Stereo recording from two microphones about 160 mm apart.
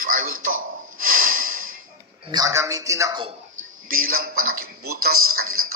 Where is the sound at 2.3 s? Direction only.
20° right (ahead or behind).